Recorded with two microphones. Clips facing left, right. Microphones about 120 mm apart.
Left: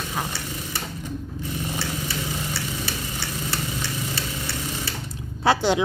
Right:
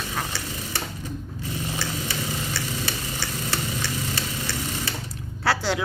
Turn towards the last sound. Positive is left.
turn(degrees=20)  # may be behind; listen again after turning